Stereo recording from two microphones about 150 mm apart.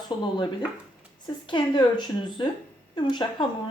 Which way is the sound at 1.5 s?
30° left (ahead or behind).